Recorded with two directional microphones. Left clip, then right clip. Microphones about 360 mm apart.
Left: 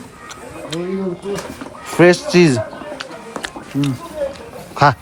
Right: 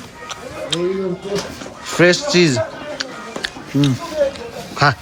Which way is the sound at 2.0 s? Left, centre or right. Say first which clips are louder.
Left 2 dB; centre.